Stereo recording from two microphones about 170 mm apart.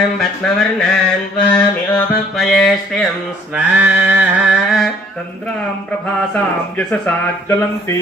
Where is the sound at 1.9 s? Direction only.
5° left (ahead or behind).